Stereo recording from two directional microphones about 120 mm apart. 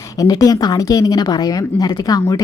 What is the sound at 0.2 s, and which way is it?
Speech, 30° left (ahead or behind).